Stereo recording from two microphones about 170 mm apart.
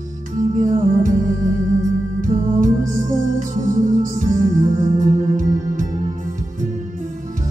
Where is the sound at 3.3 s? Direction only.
50° right (ahead or behind).